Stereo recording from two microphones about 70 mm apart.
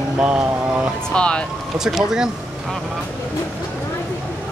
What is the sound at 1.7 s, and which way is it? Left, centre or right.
Speech, centre.